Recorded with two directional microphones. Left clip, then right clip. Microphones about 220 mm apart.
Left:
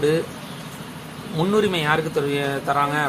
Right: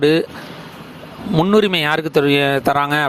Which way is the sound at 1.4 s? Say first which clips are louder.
Right 6 dB; 45° right (ahead or behind).